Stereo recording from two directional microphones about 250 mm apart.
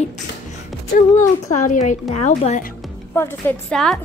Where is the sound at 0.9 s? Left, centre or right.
Left.